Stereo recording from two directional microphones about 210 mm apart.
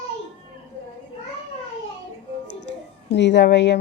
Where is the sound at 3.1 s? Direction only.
55° left (ahead or behind).